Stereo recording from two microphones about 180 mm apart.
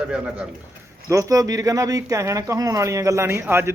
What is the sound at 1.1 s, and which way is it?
Speech, 20° right (ahead or behind).